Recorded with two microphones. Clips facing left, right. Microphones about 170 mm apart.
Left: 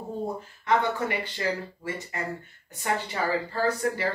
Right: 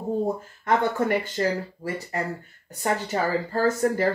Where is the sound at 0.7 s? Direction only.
45° right (ahead or behind).